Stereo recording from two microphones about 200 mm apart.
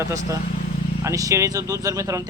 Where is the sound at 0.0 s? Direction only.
15° right (ahead or behind).